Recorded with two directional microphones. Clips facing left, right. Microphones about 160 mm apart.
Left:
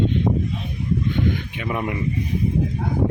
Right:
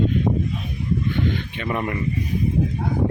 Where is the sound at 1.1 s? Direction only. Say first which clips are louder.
Left 1 dB; 15° left (ahead or behind).